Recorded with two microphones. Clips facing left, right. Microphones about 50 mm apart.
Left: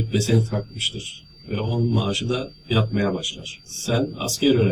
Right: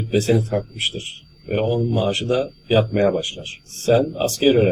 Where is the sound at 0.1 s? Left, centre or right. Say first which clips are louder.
Right 5 dB; right.